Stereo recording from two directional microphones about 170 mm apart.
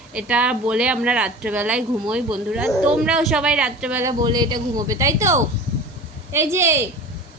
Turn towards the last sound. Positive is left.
turn(degrees=-15)  # may be behind; listen again after turning